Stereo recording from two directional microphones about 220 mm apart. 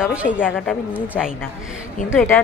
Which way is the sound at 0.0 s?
5° right (ahead or behind).